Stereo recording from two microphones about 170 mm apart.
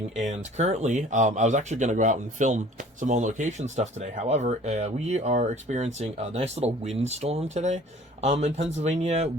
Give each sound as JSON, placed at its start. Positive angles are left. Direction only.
{"t": 0.2, "sound": "speech", "side_deg": -45}